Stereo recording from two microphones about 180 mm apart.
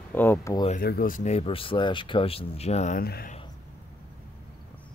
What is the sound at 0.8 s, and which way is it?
Speech, 55° left (ahead or behind).